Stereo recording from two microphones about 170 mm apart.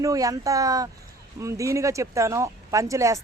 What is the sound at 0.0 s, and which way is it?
Speech, 20° right (ahead or behind).